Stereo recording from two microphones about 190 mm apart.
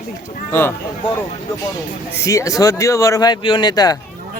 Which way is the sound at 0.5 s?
10° left (ahead or behind).